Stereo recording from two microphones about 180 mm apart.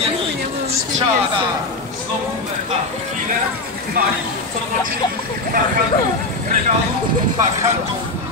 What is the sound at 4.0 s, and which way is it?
Speech, 50° right (ahead or behind).